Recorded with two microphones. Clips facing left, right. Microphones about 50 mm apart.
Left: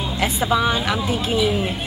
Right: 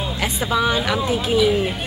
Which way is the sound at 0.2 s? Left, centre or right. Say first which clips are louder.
Left 2 dB; centre.